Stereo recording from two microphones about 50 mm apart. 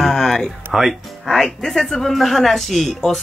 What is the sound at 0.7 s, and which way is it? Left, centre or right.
Speech, centre.